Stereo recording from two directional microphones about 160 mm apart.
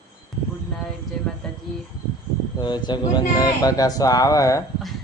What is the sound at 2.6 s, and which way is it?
A man's voice, 30° left (ahead or behind).